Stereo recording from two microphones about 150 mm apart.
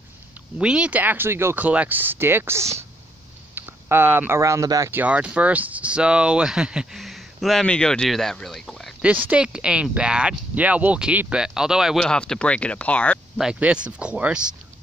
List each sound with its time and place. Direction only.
0.6 s speech: 5° right (ahead or behind)
5.0 s speech: 10° right (ahead or behind)
9.1 s speech: 10° right (ahead or behind); by 13.2 s 10° left (ahead or behind)
13.4 s speech: 5° right (ahead or behind)